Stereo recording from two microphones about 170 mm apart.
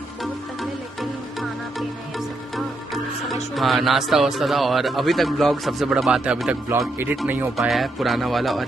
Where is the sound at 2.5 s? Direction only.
Centre (ahead or behind).